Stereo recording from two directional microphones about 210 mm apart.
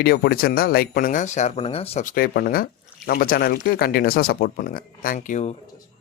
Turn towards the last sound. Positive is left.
turn(degrees=35)  # may be behind; listen again after turning